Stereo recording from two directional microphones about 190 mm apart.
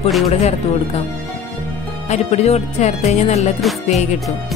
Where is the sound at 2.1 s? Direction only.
35° left (ahead or behind).